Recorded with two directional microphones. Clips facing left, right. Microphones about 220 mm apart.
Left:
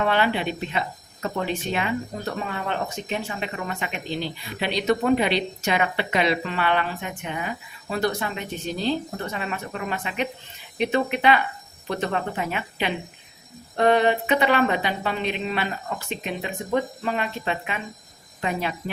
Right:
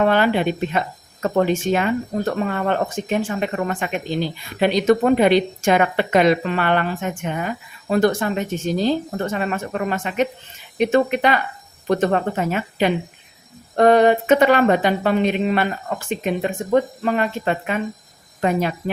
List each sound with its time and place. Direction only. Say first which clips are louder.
0.0 s a woman's voice: right 6 dB; 45° right (ahead or behind)